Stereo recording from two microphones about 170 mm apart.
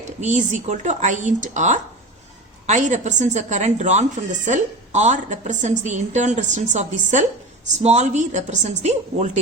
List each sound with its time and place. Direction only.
0.2 s a woman's voice: 45° right (ahead or behind)